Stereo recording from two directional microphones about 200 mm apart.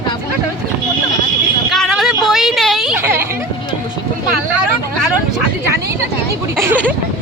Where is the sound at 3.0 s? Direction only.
10° right (ahead or behind).